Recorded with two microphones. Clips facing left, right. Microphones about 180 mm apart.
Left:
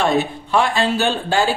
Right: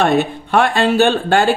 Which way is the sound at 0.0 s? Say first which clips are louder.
Right 3 dB; 60° right (ahead or behind).